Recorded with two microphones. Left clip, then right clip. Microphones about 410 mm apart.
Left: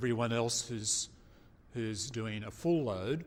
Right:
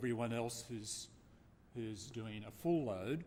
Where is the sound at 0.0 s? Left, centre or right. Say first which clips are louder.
Left 7 dB; left.